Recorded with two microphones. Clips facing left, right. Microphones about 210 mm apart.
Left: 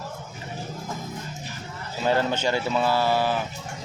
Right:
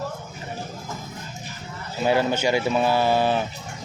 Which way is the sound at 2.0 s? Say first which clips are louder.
Right 2 dB; 10° right (ahead or behind).